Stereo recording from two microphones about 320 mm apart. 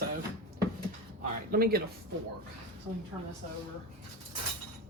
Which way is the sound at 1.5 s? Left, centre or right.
Right.